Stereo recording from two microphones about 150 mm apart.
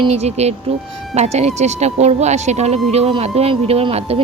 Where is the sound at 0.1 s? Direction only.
45° right (ahead or behind).